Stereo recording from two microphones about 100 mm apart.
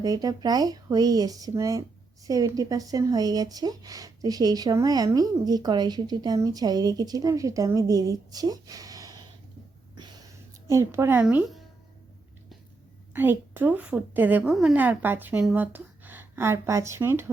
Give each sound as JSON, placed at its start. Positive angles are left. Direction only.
{"t": 0.0, "sound": "speech", "side_deg": -35}
{"t": 10.7, "sound": "speech", "side_deg": -30}
{"t": 13.1, "sound": "a woman's voice", "side_deg": -20}
{"t": 14.4, "sound": "a woman's voice", "side_deg": -5}